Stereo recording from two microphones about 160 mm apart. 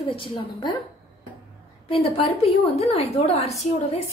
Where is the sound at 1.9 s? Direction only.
35° left (ahead or behind).